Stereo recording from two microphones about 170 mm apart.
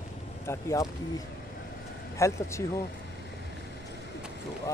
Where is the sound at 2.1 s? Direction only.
20° left (ahead or behind).